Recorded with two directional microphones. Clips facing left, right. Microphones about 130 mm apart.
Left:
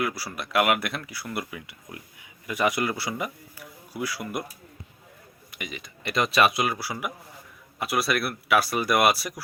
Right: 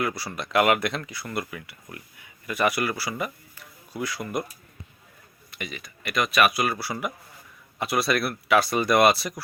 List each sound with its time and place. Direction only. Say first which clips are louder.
0.0 s speech: right 1 dB; 5° left (ahead or behind)
5.5 s speech: right 1 dB; 15° left (ahead or behind)
6.0 s speech: even; 30° left (ahead or behind); by 9.4 s 10° left (ahead or behind)